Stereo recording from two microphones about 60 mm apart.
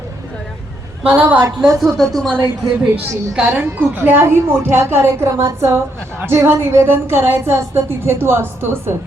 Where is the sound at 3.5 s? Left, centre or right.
Right.